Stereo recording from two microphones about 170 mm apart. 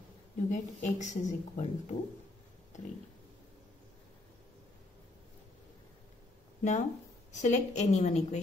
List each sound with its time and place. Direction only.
0.5 s a woman's voice: 45° left (ahead or behind)
6.6 s a woman's voice: 45° left (ahead or behind)